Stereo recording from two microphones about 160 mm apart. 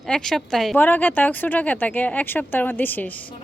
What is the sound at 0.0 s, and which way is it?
Speech, 5° left (ahead or behind).